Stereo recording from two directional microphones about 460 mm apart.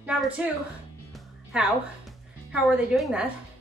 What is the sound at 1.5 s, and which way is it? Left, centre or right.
A woman's voice, centre.